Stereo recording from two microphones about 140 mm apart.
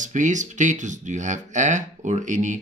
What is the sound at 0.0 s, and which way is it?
Speech, 60° right (ahead or behind).